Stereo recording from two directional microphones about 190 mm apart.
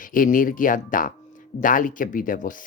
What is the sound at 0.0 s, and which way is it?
Speech, 45° left (ahead or behind).